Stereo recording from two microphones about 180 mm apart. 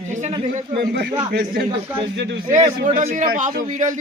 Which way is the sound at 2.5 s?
45° right (ahead or behind).